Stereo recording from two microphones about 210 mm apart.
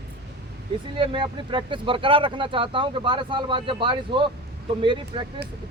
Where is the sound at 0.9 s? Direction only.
25° right (ahead or behind).